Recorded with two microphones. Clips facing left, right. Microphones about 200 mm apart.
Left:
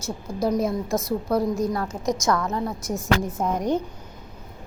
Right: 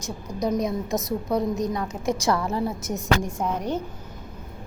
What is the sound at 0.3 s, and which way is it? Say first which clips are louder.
Speech: left 2 dB; 15° right (ahead or behind).